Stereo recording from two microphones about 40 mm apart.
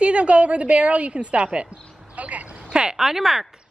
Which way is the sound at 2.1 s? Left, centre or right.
Right.